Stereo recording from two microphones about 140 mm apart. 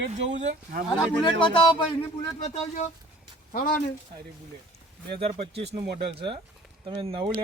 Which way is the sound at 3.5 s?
90° left.